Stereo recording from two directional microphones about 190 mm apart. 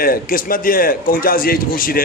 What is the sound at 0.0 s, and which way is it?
A man's voice, 50° left (ahead or behind).